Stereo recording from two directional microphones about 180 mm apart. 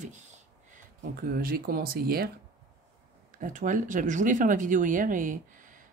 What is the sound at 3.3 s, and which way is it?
Speech, 45° right (ahead or behind).